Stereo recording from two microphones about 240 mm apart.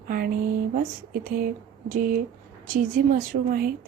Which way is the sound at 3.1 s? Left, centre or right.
Right.